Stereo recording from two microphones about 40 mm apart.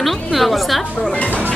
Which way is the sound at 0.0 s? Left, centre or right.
Centre.